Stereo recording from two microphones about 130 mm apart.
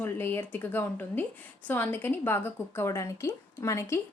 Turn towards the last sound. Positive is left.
turn(degrees=20)  # may be behind; listen again after turning